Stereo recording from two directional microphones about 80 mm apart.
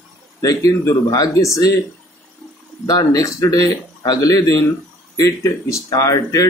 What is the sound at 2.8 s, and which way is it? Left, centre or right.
Speech, left.